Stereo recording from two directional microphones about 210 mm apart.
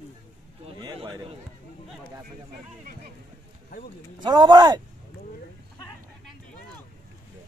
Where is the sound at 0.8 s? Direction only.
20° right (ahead or behind).